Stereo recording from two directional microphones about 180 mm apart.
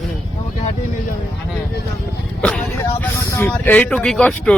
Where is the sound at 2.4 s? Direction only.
5° left (ahead or behind).